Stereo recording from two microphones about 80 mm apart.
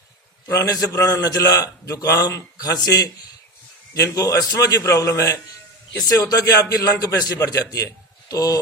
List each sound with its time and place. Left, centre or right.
0.4 s a man's voice: left